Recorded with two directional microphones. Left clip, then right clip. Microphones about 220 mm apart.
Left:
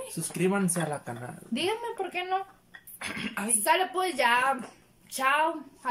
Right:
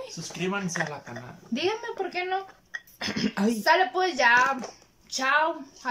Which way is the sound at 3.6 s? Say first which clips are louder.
Right 3 dB; 5° left (ahead or behind).